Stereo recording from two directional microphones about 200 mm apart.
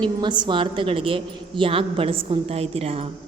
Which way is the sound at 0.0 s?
20° right (ahead or behind).